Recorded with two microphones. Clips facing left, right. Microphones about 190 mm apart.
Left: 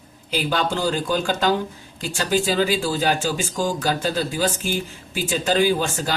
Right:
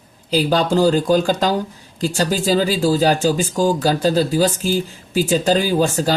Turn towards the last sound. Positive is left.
turn(degrees=-40)  # may be behind; listen again after turning